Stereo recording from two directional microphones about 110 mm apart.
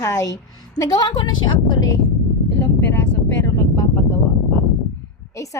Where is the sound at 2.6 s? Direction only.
25° left (ahead or behind).